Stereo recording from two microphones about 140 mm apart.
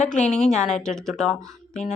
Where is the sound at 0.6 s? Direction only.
5° left (ahead or behind).